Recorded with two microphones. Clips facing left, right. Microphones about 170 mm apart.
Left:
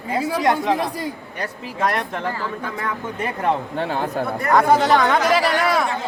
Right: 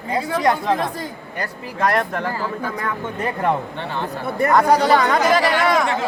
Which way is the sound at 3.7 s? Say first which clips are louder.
Left 3 dB; 45° left (ahead or behind).